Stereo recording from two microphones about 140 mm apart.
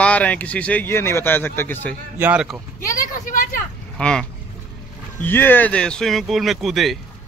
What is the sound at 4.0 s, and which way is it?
Speech, 5° left (ahead or behind).